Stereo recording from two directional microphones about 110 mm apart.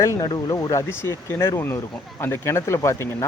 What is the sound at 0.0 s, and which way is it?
Speech, 25° left (ahead or behind).